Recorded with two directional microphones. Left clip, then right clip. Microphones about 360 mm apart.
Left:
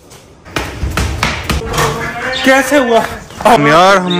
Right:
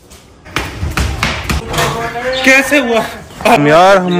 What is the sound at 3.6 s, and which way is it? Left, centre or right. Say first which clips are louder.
Speech: right 1 dB; centre.